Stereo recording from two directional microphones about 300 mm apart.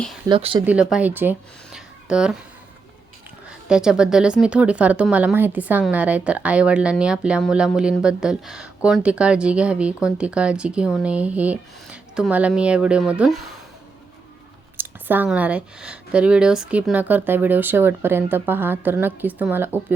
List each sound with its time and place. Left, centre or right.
0.3 s speech: centre
0.6 s speech: centre
3.7 s speech: centre
14.8 s speech: centre